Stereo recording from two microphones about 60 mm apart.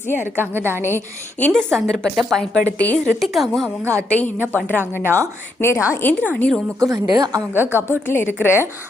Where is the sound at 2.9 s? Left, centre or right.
Centre.